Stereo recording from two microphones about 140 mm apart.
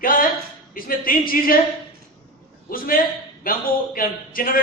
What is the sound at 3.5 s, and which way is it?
Speech, 90° left.